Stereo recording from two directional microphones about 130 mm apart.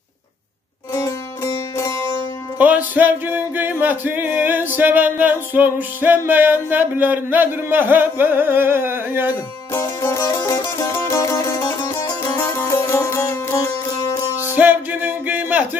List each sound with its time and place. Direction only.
0.9 s music: 20° left (ahead or behind)
2.6 s music: 10° right (ahead or behind)
9.7 s music: 20° left (ahead or behind)
14.5 s music: 15° right (ahead or behind)